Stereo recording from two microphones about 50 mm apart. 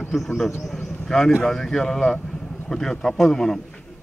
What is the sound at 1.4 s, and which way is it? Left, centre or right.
Speech, centre.